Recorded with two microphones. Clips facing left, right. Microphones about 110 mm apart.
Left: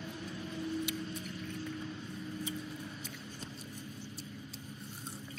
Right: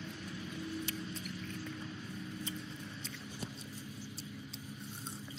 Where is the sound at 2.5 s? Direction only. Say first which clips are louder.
Left 3 dB; 5° left (ahead or behind).